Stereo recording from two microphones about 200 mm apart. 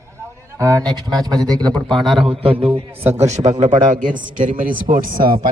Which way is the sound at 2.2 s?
25° right (ahead or behind).